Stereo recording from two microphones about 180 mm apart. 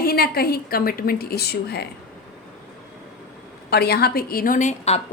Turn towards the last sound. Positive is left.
turn(degrees=40)  # may be behind; listen again after turning